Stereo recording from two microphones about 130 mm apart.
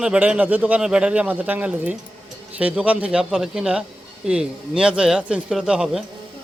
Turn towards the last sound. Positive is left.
turn(degrees=-5)  # may be behind; listen again after turning